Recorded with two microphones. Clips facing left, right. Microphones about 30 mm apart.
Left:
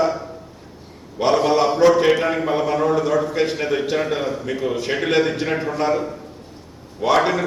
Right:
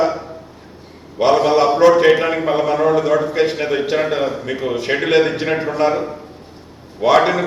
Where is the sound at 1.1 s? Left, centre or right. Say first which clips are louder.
Right 4 dB; centre.